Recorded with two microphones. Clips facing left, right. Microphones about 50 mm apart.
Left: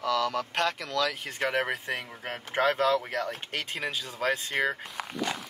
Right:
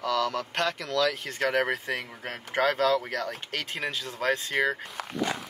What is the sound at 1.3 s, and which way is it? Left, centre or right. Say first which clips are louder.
Speech: right 2 dB; centre.